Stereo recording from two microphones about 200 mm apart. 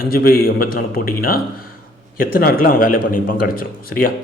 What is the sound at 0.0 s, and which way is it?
A man's voice, 45° left (ahead or behind).